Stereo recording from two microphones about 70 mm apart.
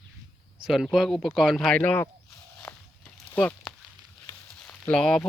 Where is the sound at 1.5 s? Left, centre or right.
Centre.